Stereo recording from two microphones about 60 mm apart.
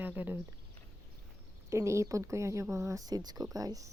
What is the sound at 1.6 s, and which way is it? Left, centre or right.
Speech, right.